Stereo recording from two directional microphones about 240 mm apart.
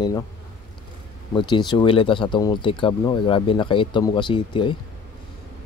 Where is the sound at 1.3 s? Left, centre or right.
Centre.